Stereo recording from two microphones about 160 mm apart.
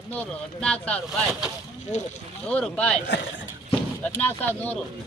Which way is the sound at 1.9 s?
50° left (ahead or behind).